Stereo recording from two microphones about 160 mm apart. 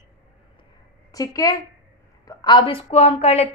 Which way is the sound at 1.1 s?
20° left (ahead or behind).